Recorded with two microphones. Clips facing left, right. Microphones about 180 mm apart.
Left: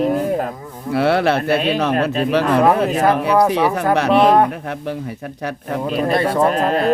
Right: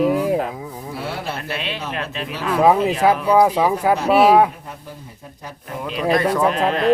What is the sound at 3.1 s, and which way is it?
Speech, 65° left (ahead or behind).